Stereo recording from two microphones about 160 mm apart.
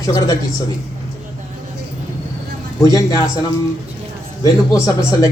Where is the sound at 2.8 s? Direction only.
20° left (ahead or behind).